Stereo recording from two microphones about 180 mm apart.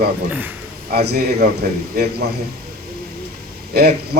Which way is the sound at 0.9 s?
60° right (ahead or behind).